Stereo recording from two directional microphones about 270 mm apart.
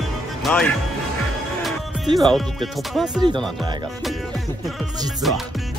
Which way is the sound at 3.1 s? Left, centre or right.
Centre.